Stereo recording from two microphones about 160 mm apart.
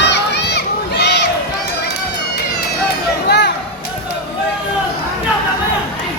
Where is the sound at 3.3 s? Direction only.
90° left.